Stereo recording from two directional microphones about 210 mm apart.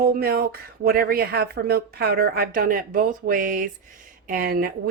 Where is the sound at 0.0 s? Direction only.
45° right (ahead or behind).